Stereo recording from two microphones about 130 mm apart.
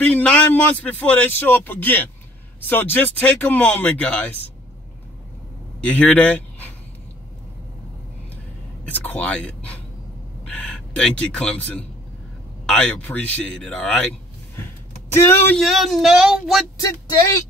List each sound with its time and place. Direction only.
0.0 s a man's voice: 10° left (ahead or behind)
5.8 s a man's voice: 10° left (ahead or behind)
8.8 s a man's voice: 15° left (ahead or behind)
15.1 s a man's voice: 15° left (ahead or behind)
15.5 s speech: centre (ahead or behind)
16.7 s speech: 25° left (ahead or behind)